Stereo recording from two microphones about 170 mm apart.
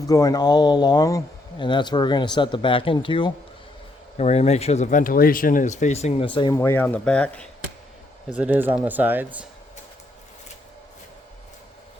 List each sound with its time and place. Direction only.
0.0 s speech: 20° left (ahead or behind)
6.5 s speech: 15° left (ahead or behind)
8.3 s speech: 10° right (ahead or behind)